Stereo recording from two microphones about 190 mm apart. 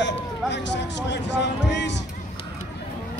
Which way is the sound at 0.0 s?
65° left (ahead or behind).